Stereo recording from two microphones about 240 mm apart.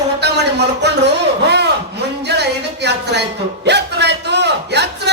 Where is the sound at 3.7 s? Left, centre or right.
Right.